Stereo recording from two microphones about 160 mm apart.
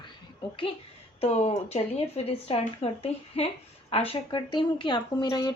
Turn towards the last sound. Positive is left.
turn(degrees=25)  # may be behind; listen again after turning